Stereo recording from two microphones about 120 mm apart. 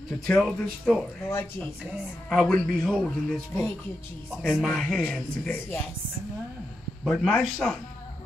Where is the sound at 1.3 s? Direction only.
15° left (ahead or behind).